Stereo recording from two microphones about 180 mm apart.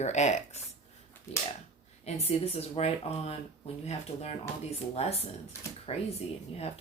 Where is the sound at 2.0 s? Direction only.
35° left (ahead or behind).